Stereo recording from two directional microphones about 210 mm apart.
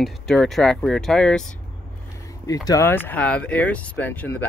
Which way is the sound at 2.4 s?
15° left (ahead or behind).